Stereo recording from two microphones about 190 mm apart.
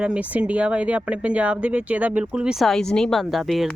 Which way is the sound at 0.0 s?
5° right (ahead or behind).